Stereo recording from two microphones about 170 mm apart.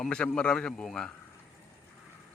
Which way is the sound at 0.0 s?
5° left (ahead or behind).